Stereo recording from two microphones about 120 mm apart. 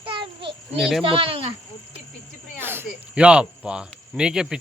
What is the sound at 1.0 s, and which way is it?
Speech, 45° right (ahead or behind).